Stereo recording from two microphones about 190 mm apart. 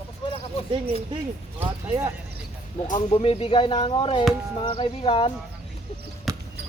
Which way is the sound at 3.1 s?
30° left (ahead or behind).